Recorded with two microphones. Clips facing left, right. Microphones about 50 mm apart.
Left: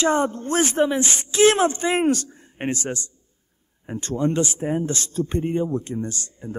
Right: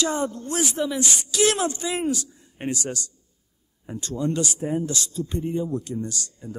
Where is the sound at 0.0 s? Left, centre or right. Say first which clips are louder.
Left 5 dB; left.